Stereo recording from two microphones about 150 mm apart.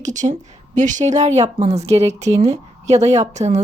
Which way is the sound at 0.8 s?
55° right (ahead or behind).